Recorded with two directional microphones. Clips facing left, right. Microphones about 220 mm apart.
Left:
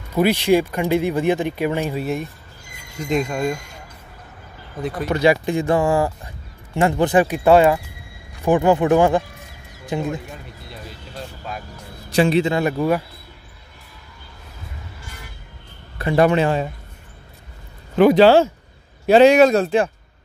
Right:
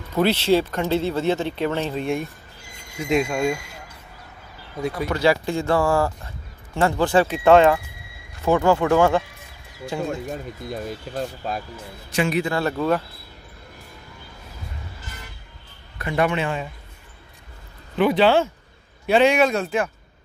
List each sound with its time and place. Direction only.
0.1 s speech: 10° left (ahead or behind)
5.1 s speech: 20° left (ahead or behind)
10.3 s speech: 45° right (ahead or behind)
12.1 s speech: 30° left (ahead or behind); by 13.0 s 15° left (ahead or behind)
16.0 s a man's voice: 35° left (ahead or behind)
17.9 s a man's voice: 40° left (ahead or behind)